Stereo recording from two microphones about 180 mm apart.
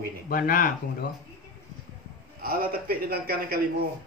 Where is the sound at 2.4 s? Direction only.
55° right (ahead or behind).